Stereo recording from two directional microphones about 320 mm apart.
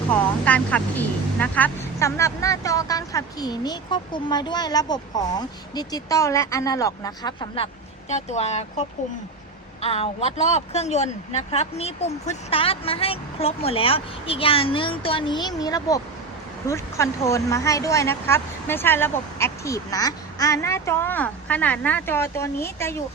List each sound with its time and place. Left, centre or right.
0.1 s speech: centre